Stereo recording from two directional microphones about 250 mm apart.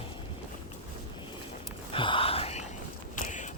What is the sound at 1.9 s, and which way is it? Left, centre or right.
Whispering, left.